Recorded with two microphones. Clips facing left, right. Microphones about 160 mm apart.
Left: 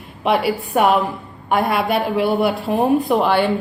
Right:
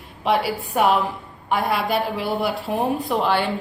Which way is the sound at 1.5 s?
60° left (ahead or behind).